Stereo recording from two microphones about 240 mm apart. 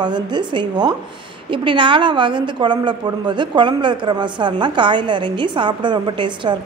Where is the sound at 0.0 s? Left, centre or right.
Centre.